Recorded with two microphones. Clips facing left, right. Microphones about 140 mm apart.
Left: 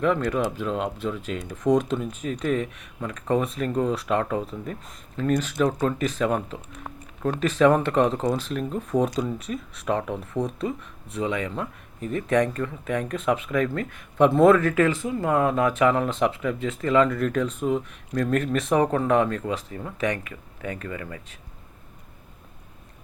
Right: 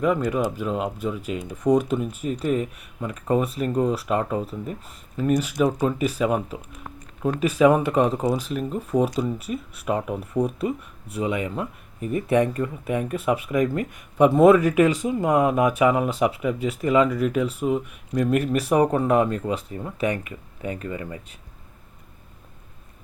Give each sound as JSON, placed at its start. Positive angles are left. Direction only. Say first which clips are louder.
{"t": 0.0, "sound": "speech", "louder": "right 1 dB", "side_deg": -10}
{"t": 20.1, "sound": "speech", "louder": "right 3 dB", "side_deg": -25}